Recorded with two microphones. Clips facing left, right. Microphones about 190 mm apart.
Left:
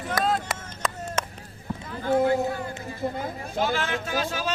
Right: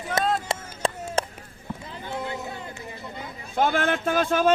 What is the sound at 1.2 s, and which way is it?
Chop, 35° right (ahead or behind).